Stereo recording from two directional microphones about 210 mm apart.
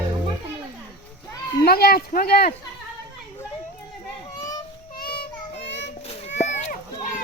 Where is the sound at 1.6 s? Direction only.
50° left (ahead or behind).